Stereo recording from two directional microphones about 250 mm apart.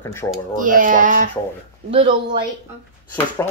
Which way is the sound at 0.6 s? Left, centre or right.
Right.